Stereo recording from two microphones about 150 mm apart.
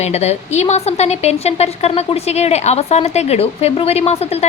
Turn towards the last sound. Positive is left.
turn(degrees=45)  # may be behind; listen again after turning